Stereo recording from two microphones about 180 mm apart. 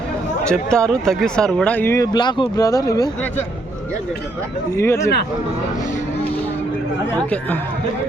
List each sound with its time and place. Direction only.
0.4 s speech: 5° left (ahead or behind); by 3.1 s 20° left (ahead or behind)
4.8 s speech: 15° left (ahead or behind)